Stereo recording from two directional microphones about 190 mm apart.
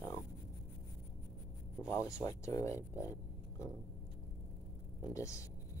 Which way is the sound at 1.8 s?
15° left (ahead or behind).